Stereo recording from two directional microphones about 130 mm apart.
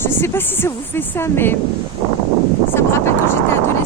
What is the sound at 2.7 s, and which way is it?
Speech, 20° left (ahead or behind).